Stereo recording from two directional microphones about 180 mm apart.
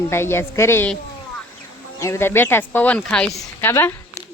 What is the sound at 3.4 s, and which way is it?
Speech, 15° left (ahead or behind).